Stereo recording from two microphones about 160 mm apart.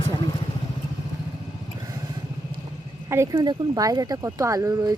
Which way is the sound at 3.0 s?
15° right (ahead or behind).